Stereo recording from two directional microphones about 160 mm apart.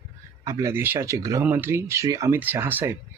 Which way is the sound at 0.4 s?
15° right (ahead or behind).